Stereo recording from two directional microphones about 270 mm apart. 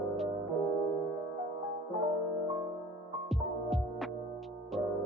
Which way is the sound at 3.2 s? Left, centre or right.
Centre.